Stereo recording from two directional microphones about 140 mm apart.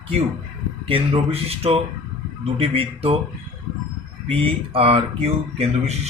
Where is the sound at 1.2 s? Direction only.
45° right (ahead or behind).